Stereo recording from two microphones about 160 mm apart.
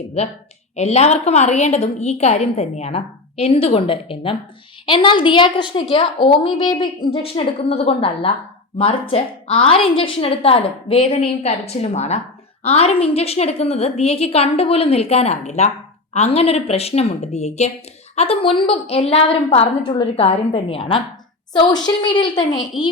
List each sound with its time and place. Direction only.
0.2 s a woman's voice: 40° left (ahead or behind)